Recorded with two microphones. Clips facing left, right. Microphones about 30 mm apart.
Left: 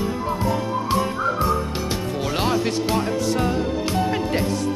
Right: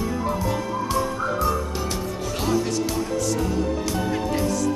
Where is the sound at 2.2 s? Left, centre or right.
Left.